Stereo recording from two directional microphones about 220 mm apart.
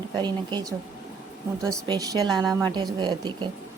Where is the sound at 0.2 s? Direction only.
20° right (ahead or behind).